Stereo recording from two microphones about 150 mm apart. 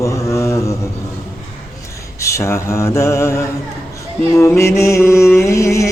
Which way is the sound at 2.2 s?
20° left (ahead or behind).